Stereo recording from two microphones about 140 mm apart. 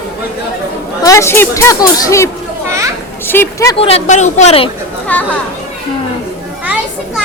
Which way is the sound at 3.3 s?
20° left (ahead or behind).